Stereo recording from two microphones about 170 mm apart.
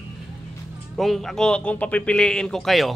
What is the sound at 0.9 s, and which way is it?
Speech, centre (ahead or behind).